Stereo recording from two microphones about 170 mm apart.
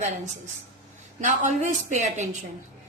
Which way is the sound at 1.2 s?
50° right (ahead or behind).